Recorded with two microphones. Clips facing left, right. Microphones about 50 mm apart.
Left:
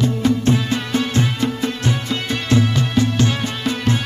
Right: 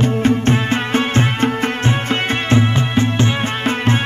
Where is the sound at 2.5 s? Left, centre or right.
Right.